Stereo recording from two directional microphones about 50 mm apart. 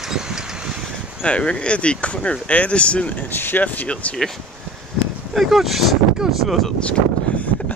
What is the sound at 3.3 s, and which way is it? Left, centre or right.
Speech, left.